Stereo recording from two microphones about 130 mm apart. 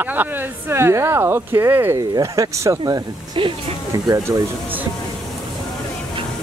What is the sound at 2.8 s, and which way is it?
Speech, 35° right (ahead or behind).